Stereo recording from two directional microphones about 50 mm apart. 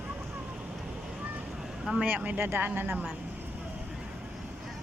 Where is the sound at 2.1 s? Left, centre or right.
Right.